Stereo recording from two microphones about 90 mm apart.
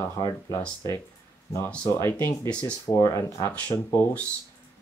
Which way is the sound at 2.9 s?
40° left (ahead or behind).